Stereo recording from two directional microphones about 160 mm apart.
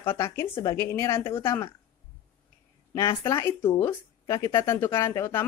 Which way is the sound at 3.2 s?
15° left (ahead or behind).